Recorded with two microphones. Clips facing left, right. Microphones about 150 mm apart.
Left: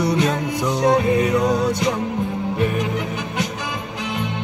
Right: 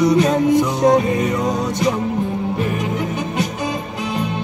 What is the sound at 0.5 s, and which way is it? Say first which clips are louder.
Music: right 1 dB; 20° right (ahead or behind).